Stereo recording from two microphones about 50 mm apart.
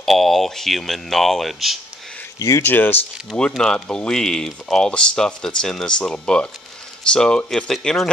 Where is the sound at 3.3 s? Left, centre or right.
Left.